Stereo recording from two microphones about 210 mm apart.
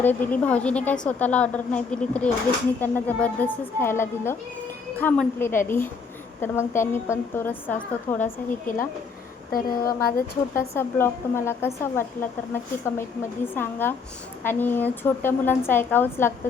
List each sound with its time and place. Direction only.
0.0 s a woman's voice: 10° left (ahead or behind)
9.5 s speech: 45° left (ahead or behind)
10.8 s a woman's voice: 10° left (ahead or behind)